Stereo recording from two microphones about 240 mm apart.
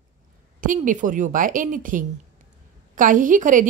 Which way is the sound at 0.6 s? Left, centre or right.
Right.